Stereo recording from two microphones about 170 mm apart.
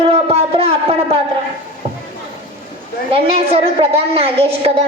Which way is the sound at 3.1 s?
35° right (ahead or behind).